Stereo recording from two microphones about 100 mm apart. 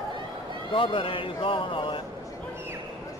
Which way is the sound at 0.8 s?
60° left (ahead or behind).